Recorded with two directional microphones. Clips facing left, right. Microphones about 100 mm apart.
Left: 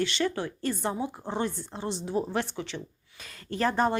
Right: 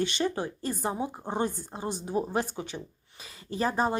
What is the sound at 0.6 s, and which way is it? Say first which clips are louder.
Speech: left 2 dB; 35° right (ahead or behind).